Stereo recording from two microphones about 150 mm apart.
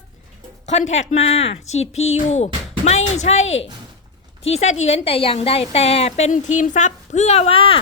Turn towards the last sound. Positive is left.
turn(degrees=40)  # may be behind; listen again after turning